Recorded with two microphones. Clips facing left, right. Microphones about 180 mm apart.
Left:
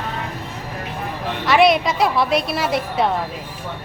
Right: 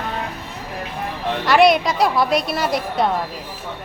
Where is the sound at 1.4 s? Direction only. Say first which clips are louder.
Right 1 dB; centre (ahead or behind).